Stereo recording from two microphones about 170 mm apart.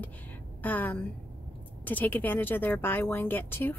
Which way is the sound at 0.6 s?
10° left (ahead or behind).